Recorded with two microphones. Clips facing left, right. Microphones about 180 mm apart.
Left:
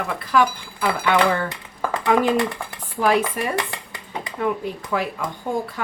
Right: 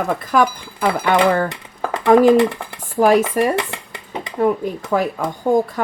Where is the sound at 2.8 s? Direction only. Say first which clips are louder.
Right 6 dB; 45° right (ahead or behind).